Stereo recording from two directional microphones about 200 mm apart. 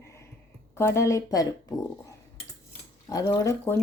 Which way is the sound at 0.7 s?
15° left (ahead or behind).